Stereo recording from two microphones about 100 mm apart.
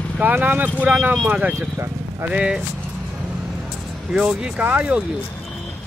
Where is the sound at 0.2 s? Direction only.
15° right (ahead or behind).